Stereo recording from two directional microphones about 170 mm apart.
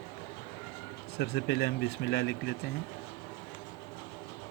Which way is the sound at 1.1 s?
70° left (ahead or behind).